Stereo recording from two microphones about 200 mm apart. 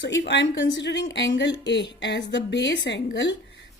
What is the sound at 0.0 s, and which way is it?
A woman's voice, 65° left (ahead or behind).